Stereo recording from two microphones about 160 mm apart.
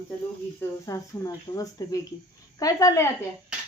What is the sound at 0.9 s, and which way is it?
A woman's voice, 20° left (ahead or behind).